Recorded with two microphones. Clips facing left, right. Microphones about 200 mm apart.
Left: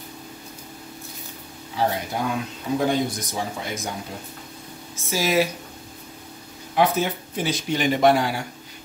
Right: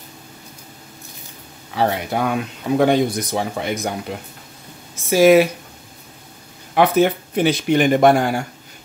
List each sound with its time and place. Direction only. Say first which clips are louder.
1.8 s speech: right 5 dB; 70° right (ahead or behind)
5.1 s speech: right 10 dB; 60° right (ahead or behind)
6.7 s speech: right 6 dB; 65° right (ahead or behind)